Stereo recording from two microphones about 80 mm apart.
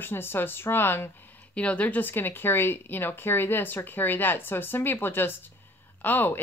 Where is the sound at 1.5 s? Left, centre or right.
Centre.